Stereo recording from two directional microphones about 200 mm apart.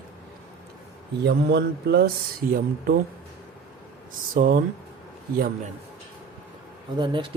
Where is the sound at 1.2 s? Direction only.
55° right (ahead or behind).